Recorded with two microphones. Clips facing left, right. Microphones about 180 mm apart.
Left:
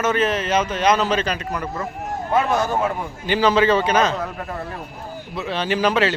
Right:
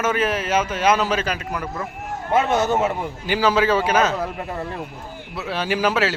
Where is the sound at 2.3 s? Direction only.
25° right (ahead or behind).